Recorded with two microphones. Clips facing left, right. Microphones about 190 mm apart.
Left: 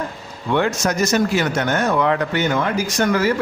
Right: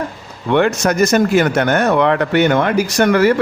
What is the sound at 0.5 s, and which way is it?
Speech, 65° right (ahead or behind).